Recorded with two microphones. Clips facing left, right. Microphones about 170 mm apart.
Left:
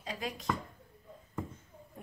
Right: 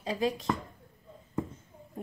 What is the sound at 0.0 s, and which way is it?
Speech, 30° right (ahead or behind).